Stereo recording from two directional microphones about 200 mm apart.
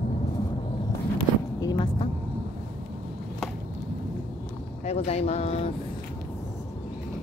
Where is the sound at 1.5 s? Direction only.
20° left (ahead or behind).